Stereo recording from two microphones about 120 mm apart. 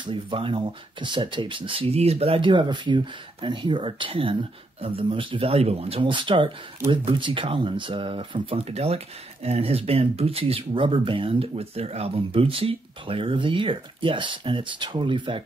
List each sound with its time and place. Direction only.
0.0 s speech: 45° right (ahead or behind)